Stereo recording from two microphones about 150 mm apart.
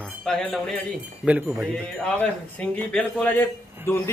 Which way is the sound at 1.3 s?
10° right (ahead or behind).